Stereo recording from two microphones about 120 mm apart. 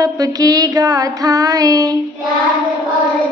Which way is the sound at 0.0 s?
30° right (ahead or behind).